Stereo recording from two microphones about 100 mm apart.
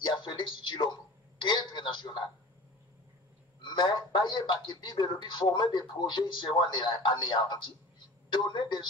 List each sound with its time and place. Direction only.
0.0 s music: 50° left (ahead or behind)
1.4 s a sound: 50° left (ahead or behind)
3.6 s a man's voice: 50° left (ahead or behind)